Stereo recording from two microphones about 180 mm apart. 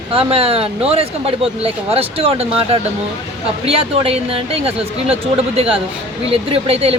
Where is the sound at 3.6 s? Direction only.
35° right (ahead or behind).